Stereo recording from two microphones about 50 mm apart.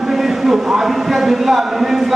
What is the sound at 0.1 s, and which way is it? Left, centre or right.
A man's voice, centre.